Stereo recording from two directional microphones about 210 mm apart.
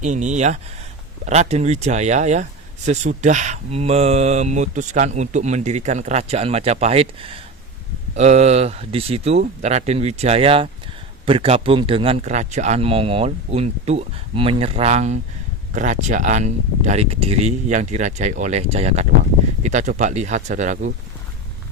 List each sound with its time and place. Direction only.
0.0 s speech: 35° right (ahead or behind)